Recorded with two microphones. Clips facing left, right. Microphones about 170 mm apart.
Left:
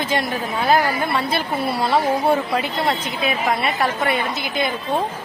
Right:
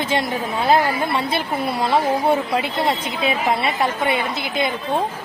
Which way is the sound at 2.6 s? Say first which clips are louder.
Right 1 dB; 25° right (ahead or behind).